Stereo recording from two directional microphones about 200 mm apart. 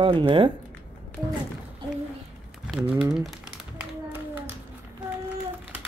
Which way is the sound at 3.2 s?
Centre (ahead or behind).